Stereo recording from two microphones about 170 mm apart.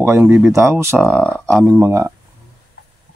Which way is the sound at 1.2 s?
5° left (ahead or behind).